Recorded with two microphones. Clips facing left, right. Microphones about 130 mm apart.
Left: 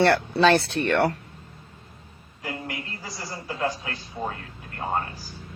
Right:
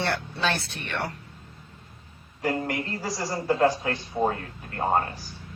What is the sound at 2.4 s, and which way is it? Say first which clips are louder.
A man's voice: right 7 dB; 35° right (ahead or behind).